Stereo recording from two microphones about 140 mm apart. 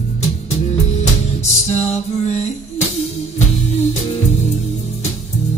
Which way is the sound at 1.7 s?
50° left (ahead or behind).